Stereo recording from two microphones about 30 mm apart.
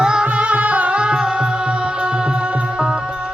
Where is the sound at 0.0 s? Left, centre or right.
Right.